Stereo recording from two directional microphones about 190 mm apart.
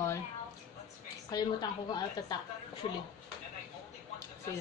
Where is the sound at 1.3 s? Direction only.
20° left (ahead or behind).